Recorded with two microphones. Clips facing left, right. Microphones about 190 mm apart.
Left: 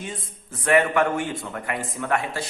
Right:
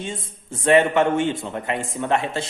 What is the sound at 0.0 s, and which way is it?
A man's voice, 25° right (ahead or behind).